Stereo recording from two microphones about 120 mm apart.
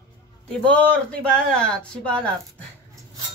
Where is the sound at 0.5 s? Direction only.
10° left (ahead or behind).